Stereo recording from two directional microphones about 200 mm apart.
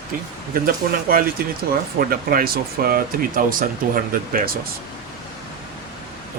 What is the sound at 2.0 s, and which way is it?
Speech, 45° right (ahead or behind).